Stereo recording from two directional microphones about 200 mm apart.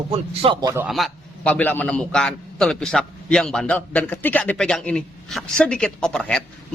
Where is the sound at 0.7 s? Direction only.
10° right (ahead or behind).